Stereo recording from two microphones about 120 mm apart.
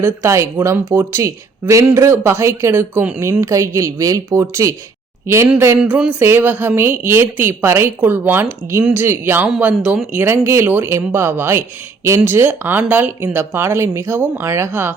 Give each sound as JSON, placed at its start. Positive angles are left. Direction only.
{"t": 0.0, "sound": "speech", "side_deg": -20}
{"t": 5.8, "sound": "speech", "side_deg": -10}